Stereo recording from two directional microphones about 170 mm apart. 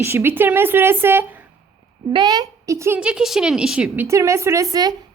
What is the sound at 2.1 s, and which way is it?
Speech, 25° right (ahead or behind).